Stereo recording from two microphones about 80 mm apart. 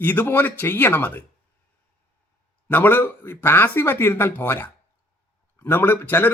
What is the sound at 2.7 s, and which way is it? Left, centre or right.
A man's voice, left.